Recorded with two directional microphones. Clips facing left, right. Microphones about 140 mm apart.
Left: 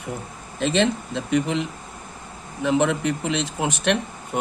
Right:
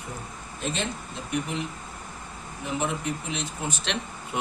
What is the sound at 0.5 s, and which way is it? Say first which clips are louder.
Speech: left 10 dB; 90° left.